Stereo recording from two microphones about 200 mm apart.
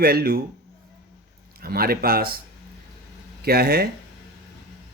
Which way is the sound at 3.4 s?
50° right (ahead or behind).